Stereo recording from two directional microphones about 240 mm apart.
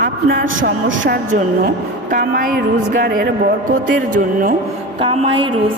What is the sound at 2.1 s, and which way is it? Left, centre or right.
A woman's voice, right.